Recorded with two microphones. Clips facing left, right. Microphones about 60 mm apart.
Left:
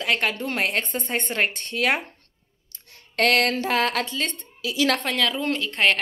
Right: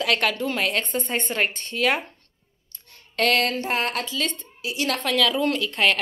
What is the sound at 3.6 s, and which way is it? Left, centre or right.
Speech, left.